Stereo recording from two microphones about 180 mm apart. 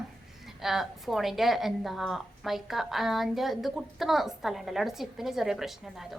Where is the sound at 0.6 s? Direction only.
Centre (ahead or behind).